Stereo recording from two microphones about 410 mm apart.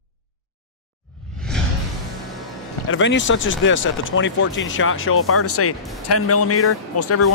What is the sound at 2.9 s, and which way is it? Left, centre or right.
Speech, left.